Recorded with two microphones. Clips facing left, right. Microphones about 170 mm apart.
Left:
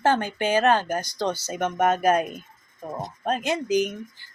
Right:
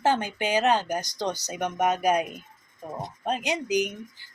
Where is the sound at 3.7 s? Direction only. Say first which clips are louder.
Left 3 dB; 15° right (ahead or behind).